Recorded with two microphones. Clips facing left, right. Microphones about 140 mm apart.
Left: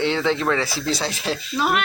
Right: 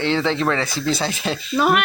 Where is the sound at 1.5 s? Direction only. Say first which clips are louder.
Right 5 dB; 55° right (ahead or behind).